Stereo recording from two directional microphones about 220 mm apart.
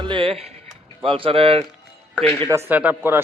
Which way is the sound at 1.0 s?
25° right (ahead or behind).